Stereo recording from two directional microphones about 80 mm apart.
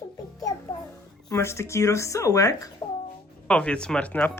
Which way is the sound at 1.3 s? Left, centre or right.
Left.